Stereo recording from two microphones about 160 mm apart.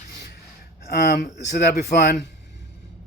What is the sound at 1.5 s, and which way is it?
Speech, 90° left.